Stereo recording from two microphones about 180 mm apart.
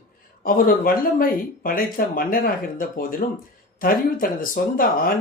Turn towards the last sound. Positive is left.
turn(degrees=50)  # may be behind; listen again after turning